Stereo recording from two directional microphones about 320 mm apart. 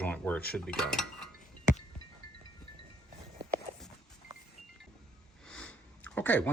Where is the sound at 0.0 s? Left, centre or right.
Centre.